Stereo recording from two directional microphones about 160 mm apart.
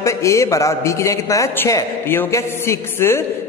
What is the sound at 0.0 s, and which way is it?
A man's voice, 20° left (ahead or behind).